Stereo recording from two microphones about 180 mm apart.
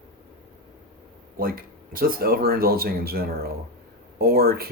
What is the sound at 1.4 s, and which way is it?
Speech, 55° right (ahead or behind).